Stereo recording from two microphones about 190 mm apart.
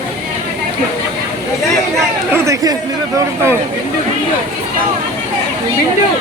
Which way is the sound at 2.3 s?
15° right (ahead or behind).